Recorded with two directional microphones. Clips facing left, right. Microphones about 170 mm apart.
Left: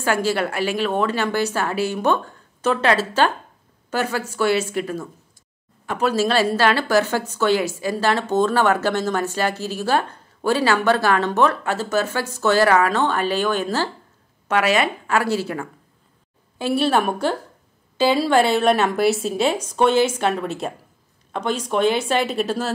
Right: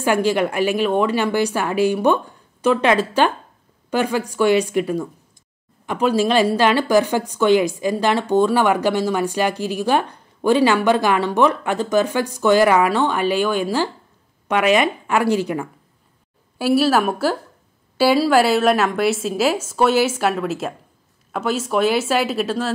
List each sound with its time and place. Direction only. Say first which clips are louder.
0.0 s a woman's voice: right 3 dB; 15° right (ahead or behind)